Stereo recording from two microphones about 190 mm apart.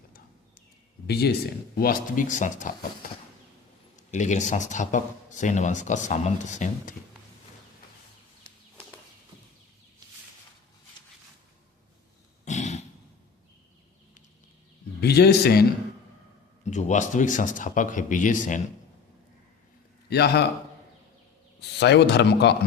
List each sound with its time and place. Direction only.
1.0 s speech: 60° left (ahead or behind)
1.8 s speech: 50° left (ahead or behind)
3.9 s speech: 40° left (ahead or behind)
12.5 s a sound: 35° left (ahead or behind)
15.0 s speech: 60° left (ahead or behind)
16.6 s speech: 40° left (ahead or behind)
20.1 s speech: 60° left (ahead or behind)
21.6 s speech: 65° left (ahead or behind)